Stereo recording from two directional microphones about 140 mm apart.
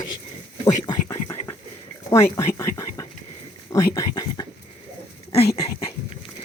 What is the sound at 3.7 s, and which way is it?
Speech, 25° left (ahead or behind).